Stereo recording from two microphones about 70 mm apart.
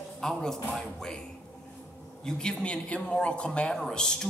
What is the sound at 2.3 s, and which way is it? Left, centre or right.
A man's voice, centre.